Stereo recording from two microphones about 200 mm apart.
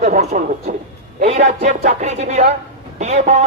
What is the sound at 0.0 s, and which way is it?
A man's voice, 35° right (ahead or behind).